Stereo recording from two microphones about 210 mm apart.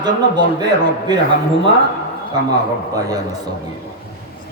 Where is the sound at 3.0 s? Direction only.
15° right (ahead or behind).